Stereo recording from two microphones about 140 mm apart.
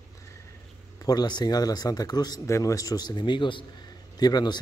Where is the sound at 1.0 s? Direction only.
30° left (ahead or behind).